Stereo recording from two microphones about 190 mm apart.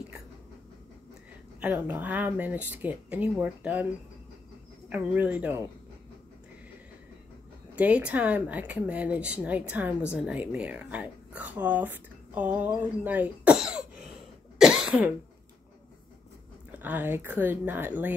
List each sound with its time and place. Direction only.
1.6 s speech: 10° right (ahead or behind)
4.8 s speech: 10° right (ahead or behind)
7.7 s speech: 5° right (ahead or behind)
14.6 s cough: 5° right (ahead or behind)
16.7 s speech: 10° right (ahead or behind)